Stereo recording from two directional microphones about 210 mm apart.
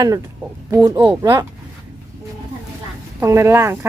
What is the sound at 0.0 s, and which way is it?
Speech, 15° right (ahead or behind).